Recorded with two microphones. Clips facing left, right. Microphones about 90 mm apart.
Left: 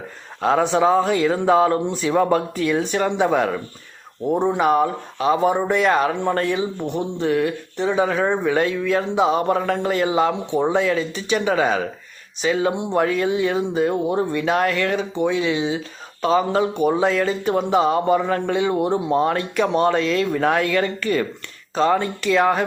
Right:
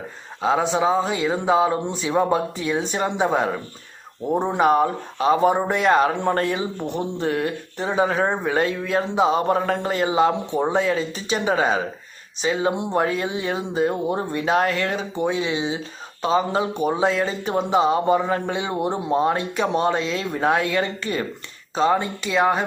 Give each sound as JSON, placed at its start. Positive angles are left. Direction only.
{"t": 0.6, "sound": "a man's voice", "side_deg": -15}